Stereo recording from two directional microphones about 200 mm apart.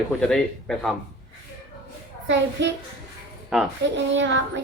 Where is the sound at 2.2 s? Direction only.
65° right (ahead or behind).